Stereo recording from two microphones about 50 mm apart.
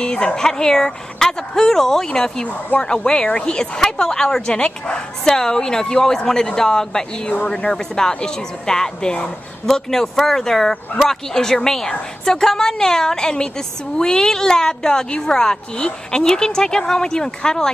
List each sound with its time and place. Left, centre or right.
0.0 s a woman's voice: centre
9.7 s a woman's voice: centre